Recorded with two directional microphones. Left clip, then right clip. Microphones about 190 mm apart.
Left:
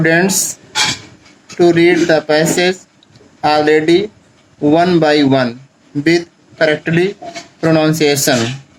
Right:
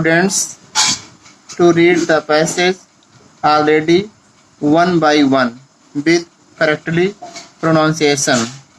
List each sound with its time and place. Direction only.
0.0 s speech: 40° left (ahead or behind)